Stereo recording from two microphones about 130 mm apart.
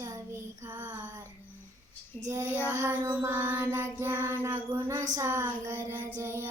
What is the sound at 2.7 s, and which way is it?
Music, 20° right (ahead or behind).